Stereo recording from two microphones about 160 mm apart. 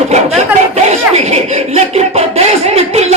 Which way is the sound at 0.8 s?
45° right (ahead or behind).